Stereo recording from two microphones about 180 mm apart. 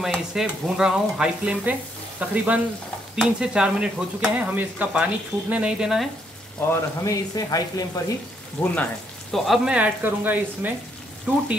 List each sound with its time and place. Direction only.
0.0 s speech: centre (ahead or behind)
6.7 s speech: 20° left (ahead or behind)
8.6 s speech: 5° left (ahead or behind); by 10.7 s 10° right (ahead or behind)